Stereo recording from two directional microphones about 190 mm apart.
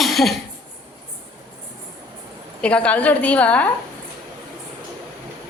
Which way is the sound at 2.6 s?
5° left (ahead or behind).